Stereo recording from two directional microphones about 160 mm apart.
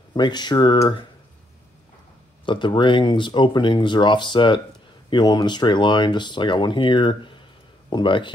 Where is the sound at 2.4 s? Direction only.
30° left (ahead or behind).